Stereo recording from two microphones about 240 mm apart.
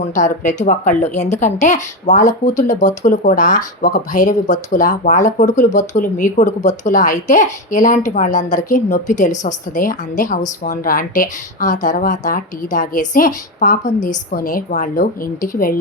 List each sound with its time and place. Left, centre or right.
0.0 s a woman's voice: left